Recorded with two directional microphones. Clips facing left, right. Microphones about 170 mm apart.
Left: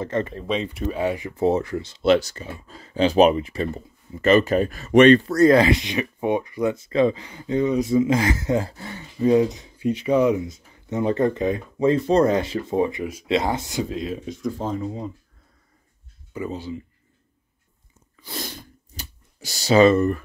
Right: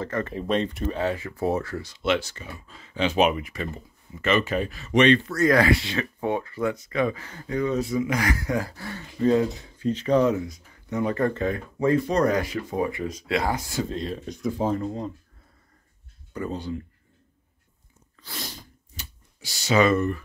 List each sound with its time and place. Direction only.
0.0 s speech: 20° left (ahead or behind)
0.5 s speech: centre (ahead or behind); by 5.2 s 45° left (ahead or behind)
5.2 s speech: 35° left (ahead or behind)
5.6 s speech: 20° left (ahead or behind)
7.2 s speech: 15° left (ahead or behind)
13.8 s speech: 5° left (ahead or behind)
16.3 s speech: 5° left (ahead or behind)
18.9 s clicking: 40° left (ahead or behind)